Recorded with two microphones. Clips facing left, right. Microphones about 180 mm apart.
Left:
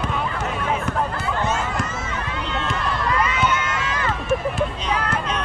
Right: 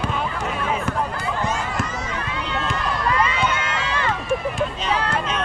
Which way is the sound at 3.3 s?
30° right (ahead or behind).